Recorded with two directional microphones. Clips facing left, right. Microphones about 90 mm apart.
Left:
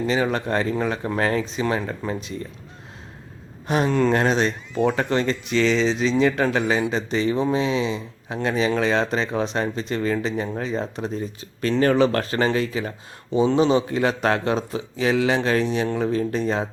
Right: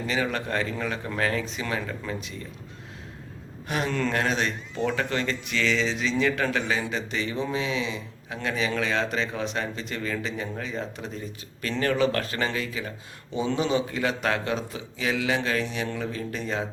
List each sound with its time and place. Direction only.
0.1 s speech: 30° left (ahead or behind)
3.7 s speech: 30° left (ahead or behind)
13.3 s speech: 25° left (ahead or behind)